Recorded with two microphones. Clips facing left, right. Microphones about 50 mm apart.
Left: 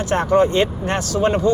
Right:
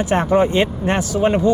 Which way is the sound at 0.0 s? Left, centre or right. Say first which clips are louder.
Even; centre.